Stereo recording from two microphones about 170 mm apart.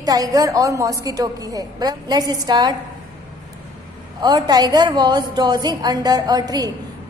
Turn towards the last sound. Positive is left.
turn(degrees=-25)  # may be behind; listen again after turning